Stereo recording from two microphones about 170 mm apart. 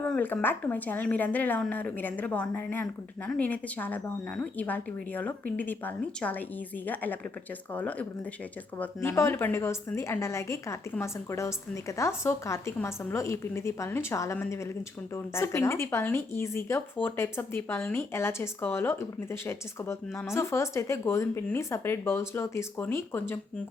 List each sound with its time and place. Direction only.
0.0 s speech: 10° left (ahead or behind)